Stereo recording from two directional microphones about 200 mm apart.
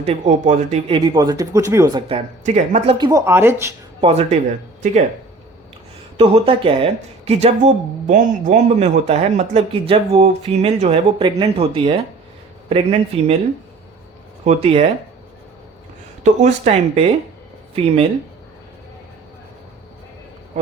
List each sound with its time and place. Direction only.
0.0 s speech: 35° right (ahead or behind)
3.1 s speech: 15° right (ahead or behind)
4.0 s speech: 30° right (ahead or behind)
6.1 s speech: 30° right (ahead or behind)
14.4 s speech: 30° right (ahead or behind)
16.2 s speech: 35° right (ahead or behind)